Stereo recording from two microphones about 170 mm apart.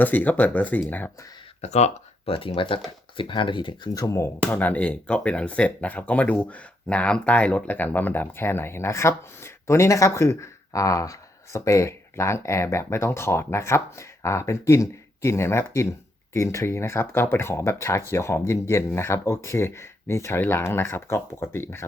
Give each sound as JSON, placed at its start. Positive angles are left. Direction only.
{"t": 0.0, "sound": "speech", "side_deg": 10}
{"t": 1.6, "sound": "speech", "side_deg": 40}